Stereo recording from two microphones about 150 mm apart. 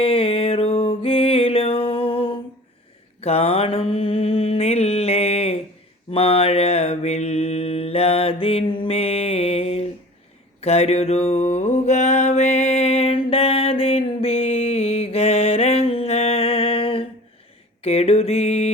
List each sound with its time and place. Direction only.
0.0 s music: 35° left (ahead or behind)
3.2 s mantra: 40° left (ahead or behind)